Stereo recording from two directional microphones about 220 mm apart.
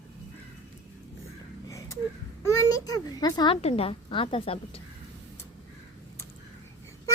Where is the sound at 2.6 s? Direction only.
15° left (ahead or behind).